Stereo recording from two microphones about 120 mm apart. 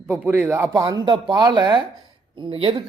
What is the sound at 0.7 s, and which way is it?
A man's voice, 30° right (ahead or behind).